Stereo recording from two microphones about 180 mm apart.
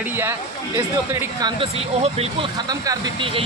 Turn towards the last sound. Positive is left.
turn(degrees=-25)  # may be behind; listen again after turning